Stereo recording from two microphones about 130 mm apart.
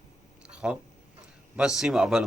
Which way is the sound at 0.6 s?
5° right (ahead or behind).